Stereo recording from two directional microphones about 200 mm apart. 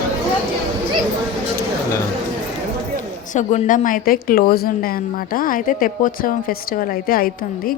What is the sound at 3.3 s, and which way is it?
A woman's voice, 40° left (ahead or behind).